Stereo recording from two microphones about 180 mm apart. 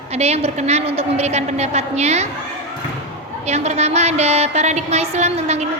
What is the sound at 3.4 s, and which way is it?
A woman's voice, 35° right (ahead or behind).